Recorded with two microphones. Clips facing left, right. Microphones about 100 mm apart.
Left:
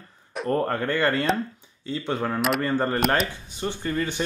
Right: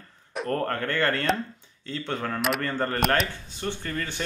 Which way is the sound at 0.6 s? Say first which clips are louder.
Left 3 dB; 15° left (ahead or behind).